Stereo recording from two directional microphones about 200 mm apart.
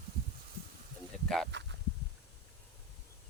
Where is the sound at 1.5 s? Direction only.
60° right (ahead or behind).